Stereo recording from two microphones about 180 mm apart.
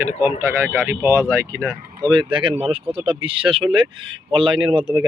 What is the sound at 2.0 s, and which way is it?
Speech, 25° right (ahead or behind).